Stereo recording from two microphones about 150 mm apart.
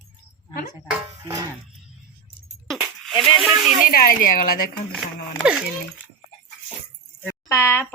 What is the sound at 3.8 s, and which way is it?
Speech, 70° left (ahead or behind).